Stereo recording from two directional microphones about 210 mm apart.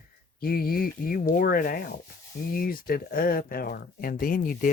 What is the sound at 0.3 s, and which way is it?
Speech, 45° left (ahead or behind).